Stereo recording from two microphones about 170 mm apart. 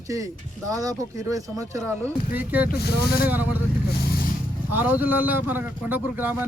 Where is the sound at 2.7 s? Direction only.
70° left (ahead or behind).